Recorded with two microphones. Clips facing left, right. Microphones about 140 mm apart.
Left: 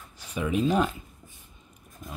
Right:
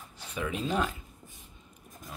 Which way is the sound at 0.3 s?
15° left (ahead or behind).